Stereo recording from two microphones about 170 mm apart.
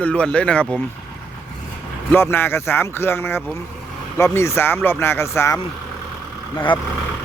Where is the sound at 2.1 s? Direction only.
15° left (ahead or behind).